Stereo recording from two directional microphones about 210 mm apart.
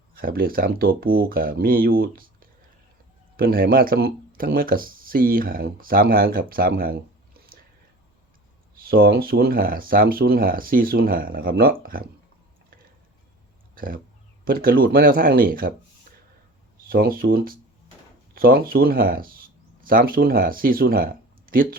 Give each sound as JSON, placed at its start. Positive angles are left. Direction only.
{"t": 0.2, "sound": "speech", "side_deg": -45}
{"t": 8.8, "sound": "speech", "side_deg": -45}
{"t": 13.7, "sound": "speech", "side_deg": -45}
{"t": 16.9, "sound": "speech", "side_deg": -45}